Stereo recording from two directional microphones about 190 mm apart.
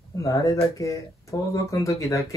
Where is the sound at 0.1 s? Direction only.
15° left (ahead or behind).